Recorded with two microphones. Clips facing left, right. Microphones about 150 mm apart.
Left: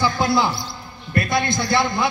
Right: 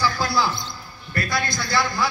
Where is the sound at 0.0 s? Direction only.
20° left (ahead or behind).